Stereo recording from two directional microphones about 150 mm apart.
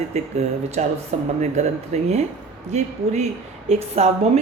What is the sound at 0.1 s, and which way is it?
A woman's voice, 45° right (ahead or behind).